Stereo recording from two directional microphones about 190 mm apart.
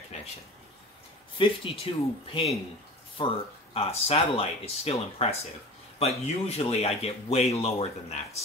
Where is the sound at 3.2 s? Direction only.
25° left (ahead or behind).